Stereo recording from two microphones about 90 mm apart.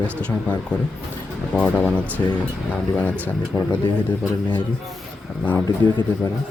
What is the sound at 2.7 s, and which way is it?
Speech, 20° left (ahead or behind).